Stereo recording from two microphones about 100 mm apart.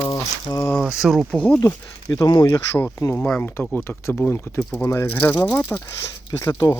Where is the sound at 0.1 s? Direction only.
30° left (ahead or behind).